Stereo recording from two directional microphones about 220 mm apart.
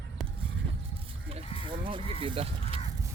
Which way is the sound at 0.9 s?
25° right (ahead or behind).